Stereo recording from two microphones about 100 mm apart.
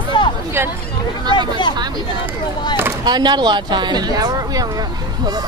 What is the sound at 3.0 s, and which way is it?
Speech, 45° right (ahead or behind).